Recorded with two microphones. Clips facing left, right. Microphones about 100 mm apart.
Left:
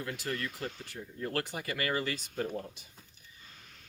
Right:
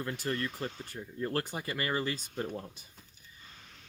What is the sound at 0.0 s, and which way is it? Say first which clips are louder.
Speech: right 2 dB; 35° right (ahead or behind).